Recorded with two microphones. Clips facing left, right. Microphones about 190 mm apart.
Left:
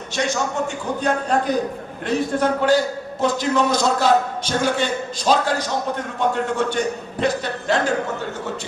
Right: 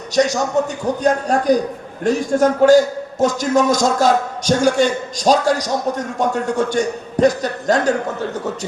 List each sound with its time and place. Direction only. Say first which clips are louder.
0.1 s a man's voice: right 7 dB; 40° right (ahead or behind)